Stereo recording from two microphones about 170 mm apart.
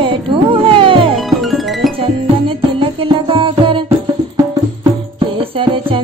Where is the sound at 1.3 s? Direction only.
Centre (ahead or behind).